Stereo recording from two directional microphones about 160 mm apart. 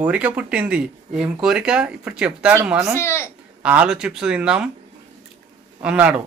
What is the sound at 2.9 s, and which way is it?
Speech, 15° left (ahead or behind).